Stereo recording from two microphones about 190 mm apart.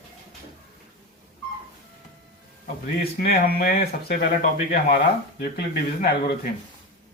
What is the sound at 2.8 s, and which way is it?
Speech, 55° left (ahead or behind).